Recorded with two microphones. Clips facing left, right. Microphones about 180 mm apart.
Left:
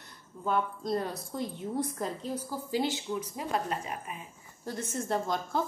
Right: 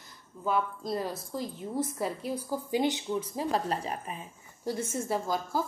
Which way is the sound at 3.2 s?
30° right (ahead or behind).